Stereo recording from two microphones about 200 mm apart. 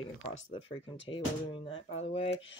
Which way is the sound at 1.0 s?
25° left (ahead or behind).